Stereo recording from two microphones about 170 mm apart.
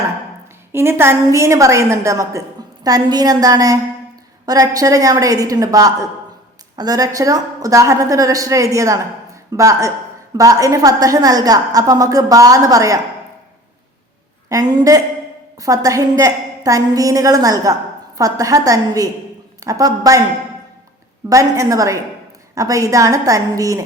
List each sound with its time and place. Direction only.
0.7 s a woman's voice: 15° right (ahead or behind)
14.5 s a woman's voice: 25° right (ahead or behind)
21.2 s a woman's voice: 20° right (ahead or behind)